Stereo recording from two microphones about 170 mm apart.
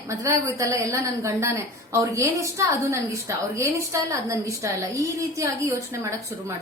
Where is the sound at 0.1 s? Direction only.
15° right (ahead or behind).